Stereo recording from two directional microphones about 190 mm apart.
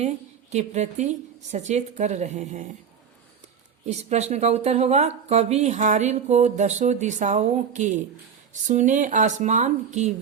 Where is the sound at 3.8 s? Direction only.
35° right (ahead or behind).